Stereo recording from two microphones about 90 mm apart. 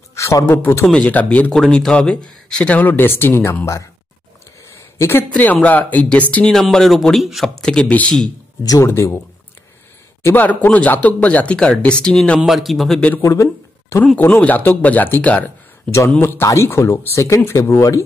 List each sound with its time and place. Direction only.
0.1 s a man's voice: 35° left (ahead or behind)
0.9 s speech: 15° left (ahead or behind)
4.9 s speech: 25° left (ahead or behind)
5.3 s speech: 15° left (ahead or behind)
6.5 s a man's voice: 5° left (ahead or behind)
8.6 s speech: 35° left (ahead or behind)
10.2 s a man's voice: 20° left (ahead or behind); by 13.0 s centre (ahead or behind)
13.2 s speech: 35° left (ahead or behind)
14.1 s speech: 20° left (ahead or behind)
16.3 s speech: 30° left (ahead or behind)